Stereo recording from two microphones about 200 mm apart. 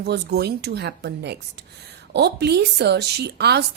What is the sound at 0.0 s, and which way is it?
A woman's voice, 55° right (ahead or behind).